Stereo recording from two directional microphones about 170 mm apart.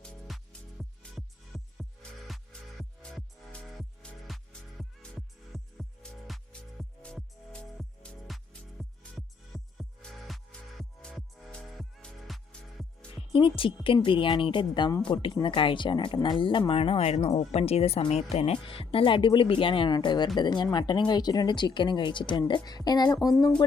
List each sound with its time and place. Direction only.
0.0 s music: 5° left (ahead or behind)
13.1 s speech: 30° left (ahead or behind)